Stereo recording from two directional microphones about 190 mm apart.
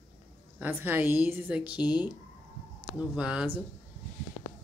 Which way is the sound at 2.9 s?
5° right (ahead or behind).